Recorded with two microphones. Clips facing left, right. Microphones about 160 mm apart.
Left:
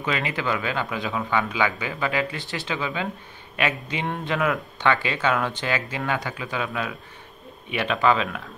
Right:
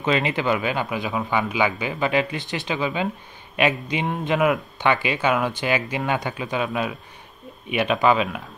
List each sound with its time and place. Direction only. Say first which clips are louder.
0.0 s a man's voice: right 5 dB; 25° right (ahead or behind)